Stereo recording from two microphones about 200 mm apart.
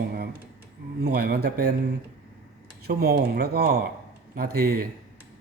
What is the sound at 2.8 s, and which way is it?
Speech, 50° right (ahead or behind).